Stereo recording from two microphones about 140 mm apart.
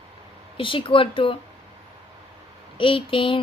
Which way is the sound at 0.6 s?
40° left (ahead or behind).